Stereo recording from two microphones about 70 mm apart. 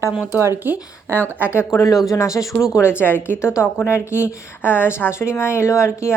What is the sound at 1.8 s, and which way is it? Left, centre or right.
Speech, left.